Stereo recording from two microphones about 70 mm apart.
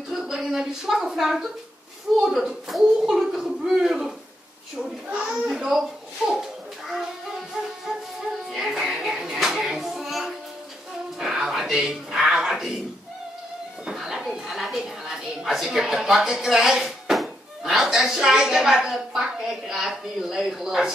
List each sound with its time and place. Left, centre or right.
0.1 s a woman's voice: centre
5.0 s a child's voice: centre
5.3 s a child's voice: centre
8.5 s music: centre
11.1 s a sound: centre
13.8 s a woman's voice: centre